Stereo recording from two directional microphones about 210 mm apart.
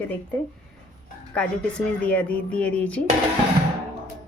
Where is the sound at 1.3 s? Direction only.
5° left (ahead or behind).